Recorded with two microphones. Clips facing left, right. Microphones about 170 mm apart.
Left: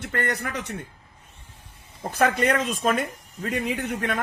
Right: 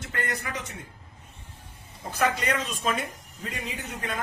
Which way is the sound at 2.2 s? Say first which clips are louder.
Left 5 dB; 55° left (ahead or behind).